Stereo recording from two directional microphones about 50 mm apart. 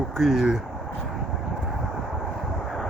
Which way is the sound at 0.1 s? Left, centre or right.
Centre.